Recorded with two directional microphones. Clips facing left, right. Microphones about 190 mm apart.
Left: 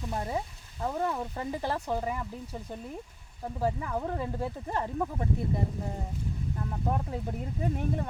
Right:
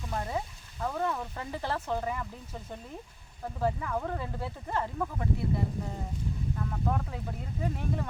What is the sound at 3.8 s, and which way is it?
Speech, 20° left (ahead or behind).